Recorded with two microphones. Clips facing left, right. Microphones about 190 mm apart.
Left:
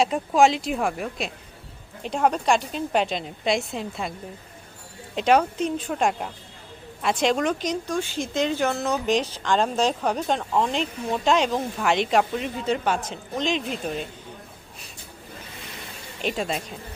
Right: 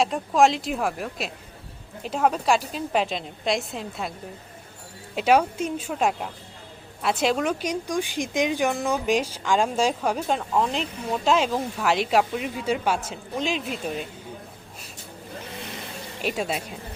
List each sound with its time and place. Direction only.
0.0 s a woman's voice: centre (ahead or behind)
5.1 s a woman's voice: 5° right (ahead or behind)
16.2 s a woman's voice: 5° right (ahead or behind)